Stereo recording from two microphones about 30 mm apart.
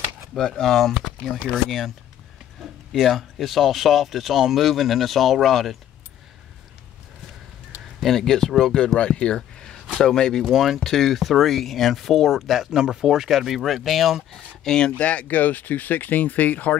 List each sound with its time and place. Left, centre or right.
0.6 s speech: centre
2.9 s speech: centre
8.0 s speech: centre
8.5 s speech: centre
8.7 s speech: left
9.9 s speech: centre
10.4 s speech: centre
12.7 s speech: right
13.0 s speech: centre
14.3 s speech: centre
15.0 s speech: left
15.2 s speech: left